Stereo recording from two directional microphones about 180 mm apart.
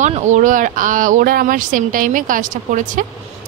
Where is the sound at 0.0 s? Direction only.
40° right (ahead or behind).